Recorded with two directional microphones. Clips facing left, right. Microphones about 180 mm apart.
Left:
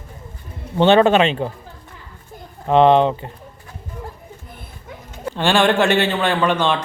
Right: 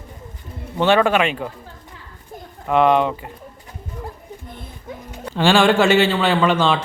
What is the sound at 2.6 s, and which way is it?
Speech, 25° left (ahead or behind).